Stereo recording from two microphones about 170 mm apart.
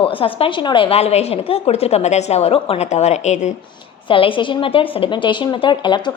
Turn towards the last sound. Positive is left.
turn(degrees=25)  # may be behind; listen again after turning